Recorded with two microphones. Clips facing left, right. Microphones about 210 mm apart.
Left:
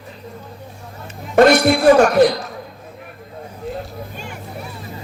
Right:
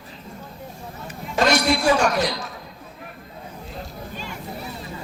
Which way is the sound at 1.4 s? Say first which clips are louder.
Left 8 dB; 55° left (ahead or behind).